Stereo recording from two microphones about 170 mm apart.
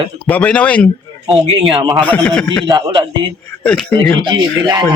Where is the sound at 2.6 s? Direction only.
25° right (ahead or behind).